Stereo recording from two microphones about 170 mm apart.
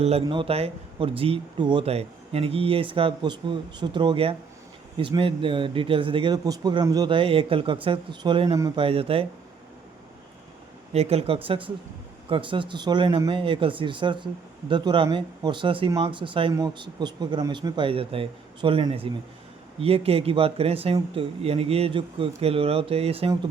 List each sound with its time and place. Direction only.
0.0 s speech: 35° right (ahead or behind)
8.8 s speech: 35° right (ahead or behind)
10.9 s speech: 35° right (ahead or behind)